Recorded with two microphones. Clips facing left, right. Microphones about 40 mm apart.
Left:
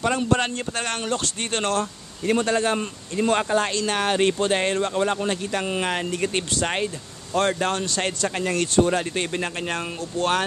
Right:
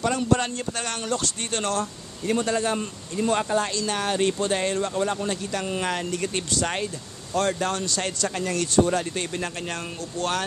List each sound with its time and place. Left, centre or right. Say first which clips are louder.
0.0 s a man's voice: left 1 dB; left